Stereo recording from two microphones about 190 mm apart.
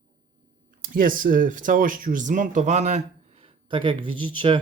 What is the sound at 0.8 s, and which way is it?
Speech, 45° right (ahead or behind).